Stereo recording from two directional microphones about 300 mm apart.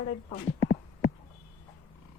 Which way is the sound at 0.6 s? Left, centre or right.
Right.